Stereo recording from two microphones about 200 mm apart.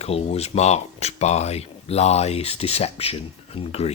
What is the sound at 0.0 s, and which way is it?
Speech, 30° left (ahead or behind).